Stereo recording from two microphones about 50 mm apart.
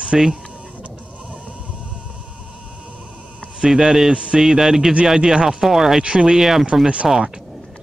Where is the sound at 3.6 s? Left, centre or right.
Centre.